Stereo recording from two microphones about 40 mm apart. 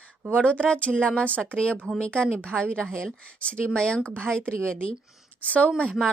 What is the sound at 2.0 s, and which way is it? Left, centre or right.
A woman's voice, left.